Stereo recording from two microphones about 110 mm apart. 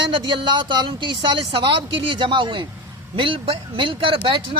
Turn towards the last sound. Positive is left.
turn(degrees=-50)  # may be behind; listen again after turning